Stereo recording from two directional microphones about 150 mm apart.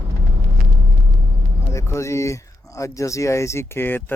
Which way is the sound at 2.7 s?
20° left (ahead or behind).